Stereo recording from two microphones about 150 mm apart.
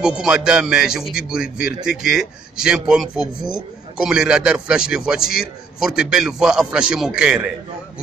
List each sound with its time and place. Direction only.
0.0 s speech: 5° right (ahead or behind)